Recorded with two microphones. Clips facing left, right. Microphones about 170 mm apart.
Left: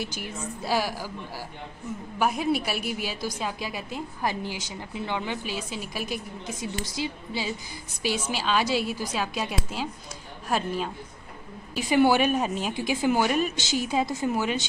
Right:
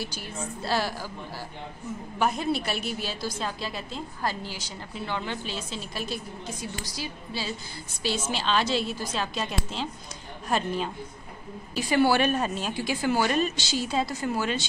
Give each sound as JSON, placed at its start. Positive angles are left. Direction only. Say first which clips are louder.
{"t": 0.0, "sound": "a woman's voice", "louder": "left 1 dB", "side_deg": 20}
{"t": 2.1, "sound": "a woman's voice", "louder": "left 1 dB", "side_deg": 10}
{"t": 11.7, "sound": "a woman's voice", "louder": "left 2 dB", "side_deg": 15}